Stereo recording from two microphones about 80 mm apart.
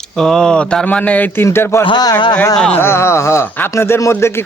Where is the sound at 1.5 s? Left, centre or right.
Left.